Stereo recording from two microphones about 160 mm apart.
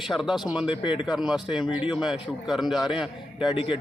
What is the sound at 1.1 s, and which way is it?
A man's voice, 5° right (ahead or behind).